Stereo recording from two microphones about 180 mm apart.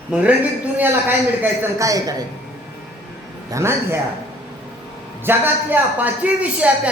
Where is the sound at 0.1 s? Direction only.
5° right (ahead or behind).